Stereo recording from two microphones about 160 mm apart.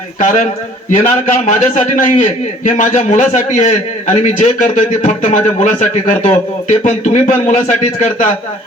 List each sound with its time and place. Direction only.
0.2 s a man's voice: 50° left (ahead or behind)